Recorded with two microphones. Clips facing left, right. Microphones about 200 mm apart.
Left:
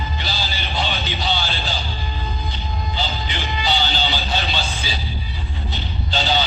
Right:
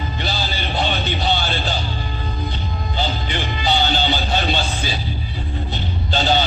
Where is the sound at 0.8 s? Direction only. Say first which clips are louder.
Right 3 dB; 50° right (ahead or behind).